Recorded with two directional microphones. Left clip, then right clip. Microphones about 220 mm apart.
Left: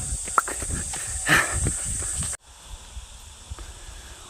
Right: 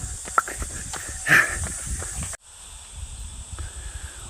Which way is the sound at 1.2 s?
15° left (ahead or behind).